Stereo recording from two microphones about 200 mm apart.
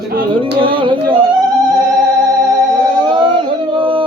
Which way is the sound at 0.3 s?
25° right (ahead or behind).